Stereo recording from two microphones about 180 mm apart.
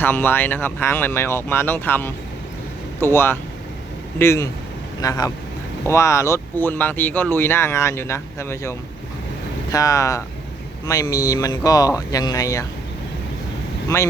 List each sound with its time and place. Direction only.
0.0 s speech: 10° left (ahead or behind)